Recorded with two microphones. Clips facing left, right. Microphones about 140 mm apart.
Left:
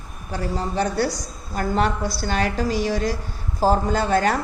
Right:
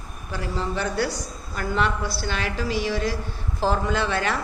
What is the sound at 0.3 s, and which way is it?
A woman's voice, 40° left (ahead or behind).